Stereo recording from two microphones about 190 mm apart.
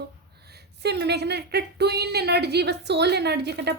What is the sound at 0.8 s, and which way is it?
A woman's voice, 60° right (ahead or behind).